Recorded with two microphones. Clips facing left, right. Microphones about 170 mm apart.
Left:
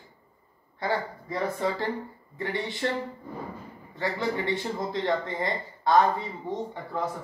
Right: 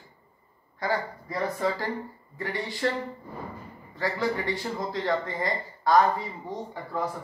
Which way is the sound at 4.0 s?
20° left (ahead or behind).